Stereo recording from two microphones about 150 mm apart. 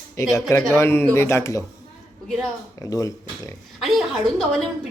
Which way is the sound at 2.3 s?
5° left (ahead or behind).